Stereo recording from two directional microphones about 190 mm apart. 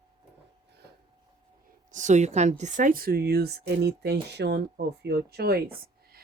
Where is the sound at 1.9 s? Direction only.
40° right (ahead or behind).